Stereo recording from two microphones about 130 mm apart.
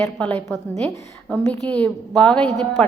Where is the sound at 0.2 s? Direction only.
10° left (ahead or behind).